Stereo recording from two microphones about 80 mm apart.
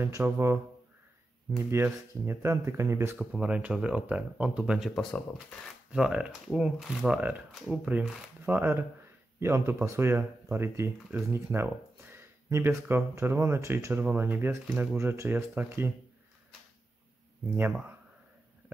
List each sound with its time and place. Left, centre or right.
0.0 s speech: right
1.7 s speech: right
3.3 s speech: centre
5.1 s speech: centre
5.9 s speech: centre; by 11.1 s right
11.3 s a sound: right
12.8 s speech: right